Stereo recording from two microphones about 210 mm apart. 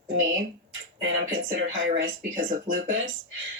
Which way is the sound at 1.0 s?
65° right (ahead or behind).